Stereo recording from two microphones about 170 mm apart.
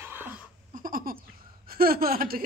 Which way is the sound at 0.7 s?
55° right (ahead or behind).